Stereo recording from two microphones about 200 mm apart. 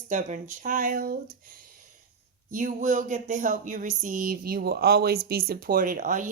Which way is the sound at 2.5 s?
40° right (ahead or behind).